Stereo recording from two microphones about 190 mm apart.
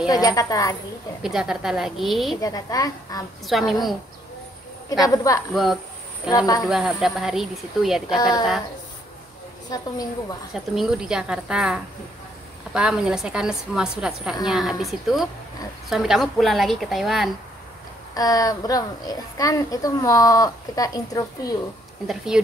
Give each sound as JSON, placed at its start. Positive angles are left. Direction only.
{"t": 0.1, "sound": "a woman's voice", "side_deg": 20}
{"t": 1.2, "sound": "a woman's voice", "side_deg": -5}
{"t": 2.4, "sound": "a woman's voice", "side_deg": 20}
{"t": 3.4, "sound": "a woman's voice", "side_deg": 0}
{"t": 5.1, "sound": "a woman's voice", "side_deg": 20}
{"t": 5.5, "sound": "a woman's voice", "side_deg": 0}
{"t": 6.3, "sound": "a woman's voice", "side_deg": 20}
{"t": 6.7, "sound": "a woman's voice", "side_deg": 0}
{"t": 8.1, "sound": "a woman's voice", "side_deg": 20}
{"t": 9.7, "sound": "a woman's voice", "side_deg": 20}
{"t": 10.5, "sound": "a woman's voice", "side_deg": 0}
{"t": 18.1, "sound": "a woman's voice", "side_deg": 20}
{"t": 22.0, "sound": "a woman's voice", "side_deg": 0}